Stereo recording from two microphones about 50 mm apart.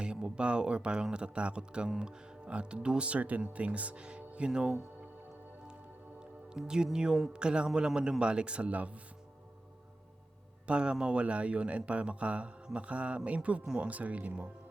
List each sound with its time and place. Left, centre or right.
0.0 s a man's voice: centre
6.1 s a man's voice: centre
10.7 s a man's voice: centre